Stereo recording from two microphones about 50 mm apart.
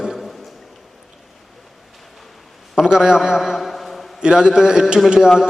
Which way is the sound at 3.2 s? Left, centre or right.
Centre.